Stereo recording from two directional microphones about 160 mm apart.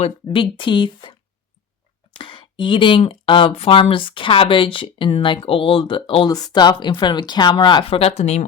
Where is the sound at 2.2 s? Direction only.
30° left (ahead or behind).